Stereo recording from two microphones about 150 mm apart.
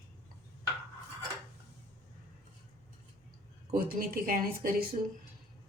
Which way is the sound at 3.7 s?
70° right (ahead or behind).